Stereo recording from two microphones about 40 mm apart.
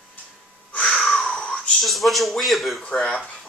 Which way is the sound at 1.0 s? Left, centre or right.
Left.